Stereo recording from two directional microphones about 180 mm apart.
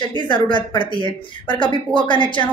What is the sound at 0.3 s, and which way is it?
Speech, 25° left (ahead or behind).